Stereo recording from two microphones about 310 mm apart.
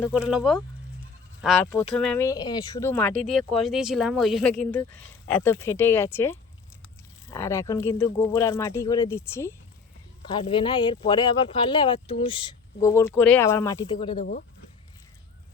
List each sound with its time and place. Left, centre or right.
0.0 s speech: centre
1.6 s speech: centre
14.2 s speech: left